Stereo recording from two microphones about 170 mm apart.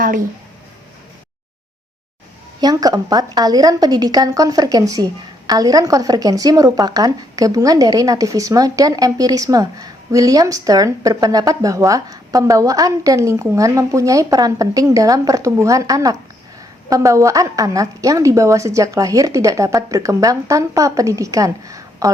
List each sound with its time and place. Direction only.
2.6 s a woman's voice: 25° right (ahead or behind)